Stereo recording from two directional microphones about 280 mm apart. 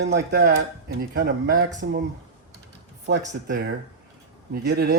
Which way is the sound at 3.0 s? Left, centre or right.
Right.